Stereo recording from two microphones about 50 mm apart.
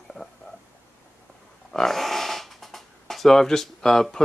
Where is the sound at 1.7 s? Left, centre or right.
Centre.